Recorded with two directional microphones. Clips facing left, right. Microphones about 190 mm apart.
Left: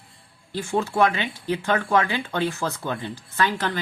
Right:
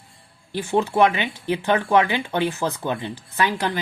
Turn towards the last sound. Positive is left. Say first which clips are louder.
# right 1 dB
turn(degrees=-15)  # may be behind; listen again after turning